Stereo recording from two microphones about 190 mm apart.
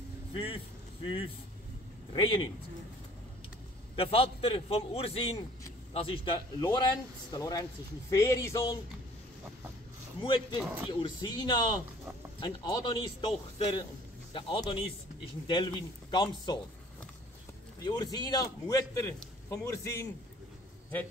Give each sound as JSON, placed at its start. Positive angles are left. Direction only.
{"t": 0.3, "sound": "speech", "side_deg": 30}
{"t": 2.1, "sound": "a man's voice", "side_deg": 25}
{"t": 3.9, "sound": "a man's voice", "side_deg": 30}
{"t": 10.2, "sound": "a man's voice", "side_deg": 25}
{"t": 10.6, "sound": "speech", "side_deg": -10}
{"t": 10.9, "sound": "a man's voice", "side_deg": 25}
{"t": 17.8, "sound": "a man's voice", "side_deg": 20}